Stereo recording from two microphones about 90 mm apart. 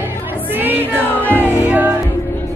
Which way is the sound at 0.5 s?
20° right (ahead or behind).